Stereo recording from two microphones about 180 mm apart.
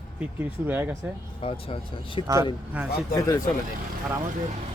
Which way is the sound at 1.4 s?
30° left (ahead or behind).